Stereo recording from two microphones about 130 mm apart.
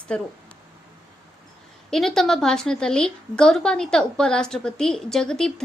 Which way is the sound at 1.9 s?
5° left (ahead or behind).